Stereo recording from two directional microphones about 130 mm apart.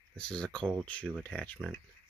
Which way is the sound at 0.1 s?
10° left (ahead or behind).